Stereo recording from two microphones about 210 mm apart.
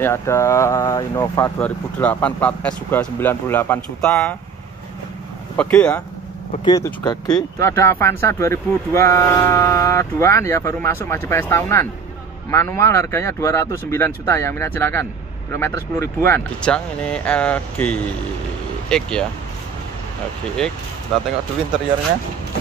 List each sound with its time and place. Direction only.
0.0 s speech: 10° left (ahead or behind)
5.6 s speech: 5° left (ahead or behind)
6.5 s speech: 20° left (ahead or behind); by 19.2 s 5° left (ahead or behind)